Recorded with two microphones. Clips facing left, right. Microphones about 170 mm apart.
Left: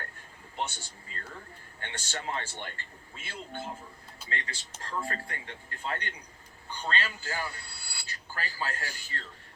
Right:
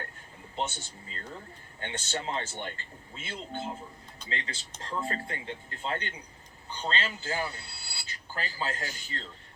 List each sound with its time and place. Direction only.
0.5 s speech: 25° right (ahead or behind)